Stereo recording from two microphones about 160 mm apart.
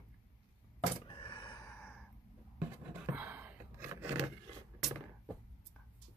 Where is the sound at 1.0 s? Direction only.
30° left (ahead or behind).